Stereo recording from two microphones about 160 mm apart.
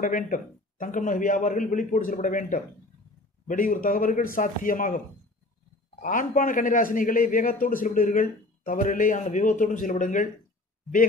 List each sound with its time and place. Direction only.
0.0 s a man's voice: 55° left (ahead or behind)
6.0 s a man's voice: 55° left (ahead or behind)